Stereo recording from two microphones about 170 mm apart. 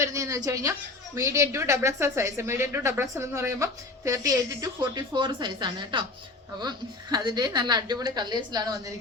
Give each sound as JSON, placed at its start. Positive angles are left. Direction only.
{"t": 0.0, "sound": "a woman's voice", "side_deg": -20}